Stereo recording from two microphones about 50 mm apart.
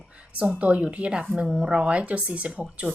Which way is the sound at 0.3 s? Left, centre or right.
Right.